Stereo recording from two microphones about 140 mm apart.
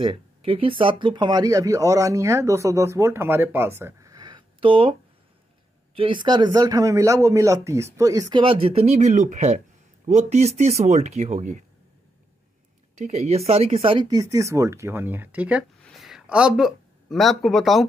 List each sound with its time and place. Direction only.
0.0 s speech: 40° right (ahead or behind)
5.9 s speech: 35° right (ahead or behind)
8.4 s speech: 40° right (ahead or behind); by 11.6 s 55° right (ahead or behind)
12.9 s speech: 50° right (ahead or behind); by 15.6 s 10° right (ahead or behind)
15.8 s a sound: centre (ahead or behind)